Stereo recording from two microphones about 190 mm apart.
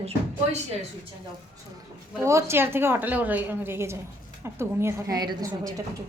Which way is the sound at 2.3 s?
15° right (ahead or behind).